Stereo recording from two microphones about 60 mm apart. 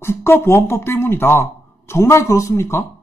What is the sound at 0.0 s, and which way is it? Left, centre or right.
Speech, left.